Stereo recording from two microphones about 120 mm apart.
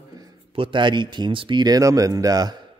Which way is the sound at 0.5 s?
45° right (ahead or behind).